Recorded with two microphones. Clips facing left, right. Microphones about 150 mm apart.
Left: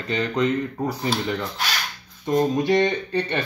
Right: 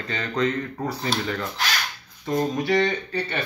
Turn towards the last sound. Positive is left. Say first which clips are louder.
# left 3 dB
turn(degrees=25)  # may be behind; listen again after turning